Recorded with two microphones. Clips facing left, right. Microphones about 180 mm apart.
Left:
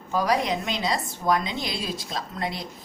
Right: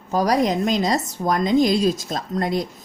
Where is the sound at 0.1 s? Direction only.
40° right (ahead or behind).